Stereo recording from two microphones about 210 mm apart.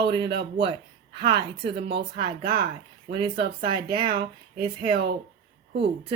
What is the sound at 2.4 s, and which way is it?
Speech, 45° right (ahead or behind).